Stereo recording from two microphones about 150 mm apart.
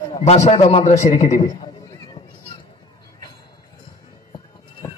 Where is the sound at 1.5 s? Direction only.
25° left (ahead or behind).